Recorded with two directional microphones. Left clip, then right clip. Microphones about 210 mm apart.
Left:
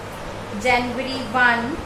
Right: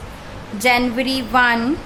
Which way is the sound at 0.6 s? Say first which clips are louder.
Right 4 dB; 55° right (ahead or behind).